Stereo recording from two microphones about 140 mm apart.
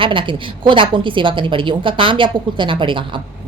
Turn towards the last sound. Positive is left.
turn(degrees=-35)  # may be behind; listen again after turning